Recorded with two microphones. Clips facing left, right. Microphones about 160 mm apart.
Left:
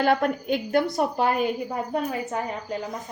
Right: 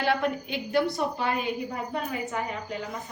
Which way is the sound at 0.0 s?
45° left (ahead or behind).